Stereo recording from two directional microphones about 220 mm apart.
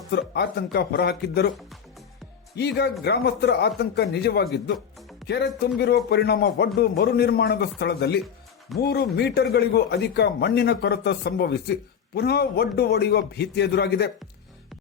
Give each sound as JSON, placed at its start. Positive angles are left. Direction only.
{"t": 0.1, "sound": "speech", "side_deg": 50}
{"t": 2.6, "sound": "speech", "side_deg": 50}